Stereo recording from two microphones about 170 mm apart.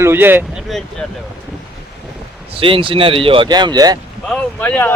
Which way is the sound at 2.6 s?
30° right (ahead or behind).